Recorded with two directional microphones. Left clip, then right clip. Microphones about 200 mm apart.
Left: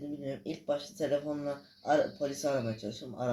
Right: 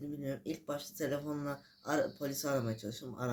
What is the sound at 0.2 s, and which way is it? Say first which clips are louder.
Speech: left 2 dB; 15° right (ahead or behind).